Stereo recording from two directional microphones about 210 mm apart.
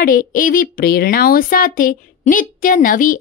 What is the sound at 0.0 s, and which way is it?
A woman's voice, 40° left (ahead or behind).